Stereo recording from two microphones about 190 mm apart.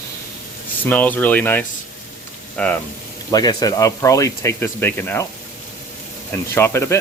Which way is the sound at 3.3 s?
20° left (ahead or behind).